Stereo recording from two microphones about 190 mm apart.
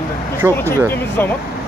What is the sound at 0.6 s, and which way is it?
Speech, 10° left (ahead or behind).